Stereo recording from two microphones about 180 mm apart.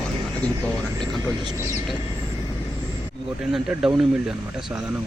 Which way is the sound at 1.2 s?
20° right (ahead or behind).